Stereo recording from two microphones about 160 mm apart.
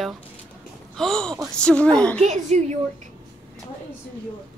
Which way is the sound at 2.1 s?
45° right (ahead or behind).